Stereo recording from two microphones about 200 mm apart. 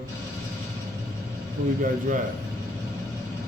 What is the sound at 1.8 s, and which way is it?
Speech, 40° right (ahead or behind).